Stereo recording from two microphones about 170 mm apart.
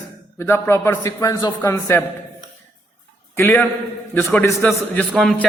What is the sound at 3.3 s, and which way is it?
A man's voice, 15° left (ahead or behind).